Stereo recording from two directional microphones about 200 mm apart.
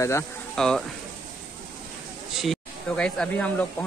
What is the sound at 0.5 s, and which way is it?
Speech, 5° left (ahead or behind).